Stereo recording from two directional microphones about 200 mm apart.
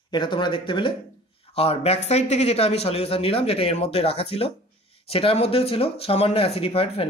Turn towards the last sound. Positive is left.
turn(degrees=30)  # may be behind; listen again after turning